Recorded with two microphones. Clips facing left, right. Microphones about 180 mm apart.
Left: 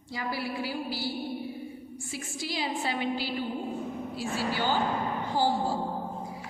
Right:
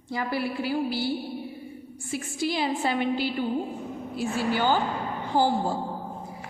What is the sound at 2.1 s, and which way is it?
A woman's voice, 55° right (ahead or behind).